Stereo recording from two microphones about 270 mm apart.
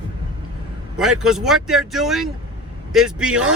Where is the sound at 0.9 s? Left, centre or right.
Centre.